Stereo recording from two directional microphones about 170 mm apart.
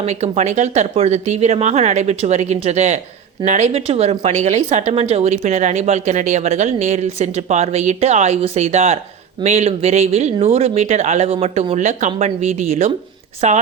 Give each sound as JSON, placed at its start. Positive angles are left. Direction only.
{"t": 0.0, "sound": "speech", "side_deg": -40}